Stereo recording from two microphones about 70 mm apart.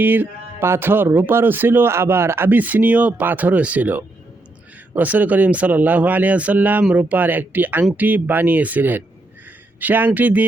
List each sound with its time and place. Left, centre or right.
0.0 s speech: right